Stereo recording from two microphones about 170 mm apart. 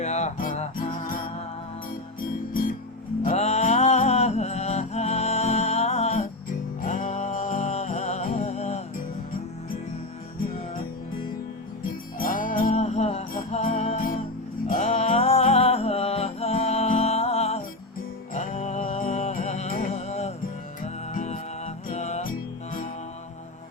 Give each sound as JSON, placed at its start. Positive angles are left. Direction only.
{"t": 0.0, "sound": "music", "side_deg": 45}
{"t": 2.5, "sound": "music", "side_deg": 55}
{"t": 3.2, "sound": "music", "side_deg": 40}
{"t": 11.8, "sound": "music", "side_deg": 55}